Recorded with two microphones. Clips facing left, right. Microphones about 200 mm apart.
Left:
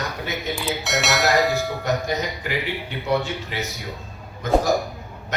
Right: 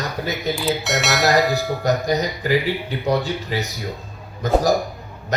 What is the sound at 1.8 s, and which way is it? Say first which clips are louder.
A man's voice: right 6 dB; 35° right (ahead or behind).